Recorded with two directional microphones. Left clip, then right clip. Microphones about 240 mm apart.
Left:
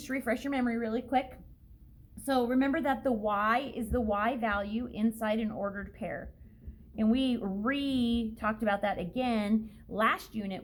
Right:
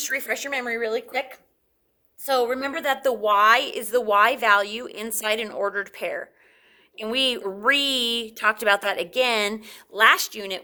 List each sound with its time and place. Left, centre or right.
0.0 s a woman's voice: right